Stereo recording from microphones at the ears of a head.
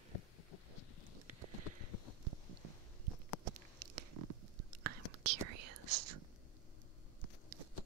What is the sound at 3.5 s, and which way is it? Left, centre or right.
Whispering, right.